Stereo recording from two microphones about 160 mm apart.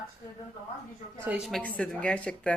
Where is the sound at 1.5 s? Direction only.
10° left (ahead or behind).